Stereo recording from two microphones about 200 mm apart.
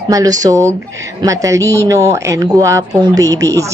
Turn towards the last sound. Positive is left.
turn(degrees=-15)  # may be behind; listen again after turning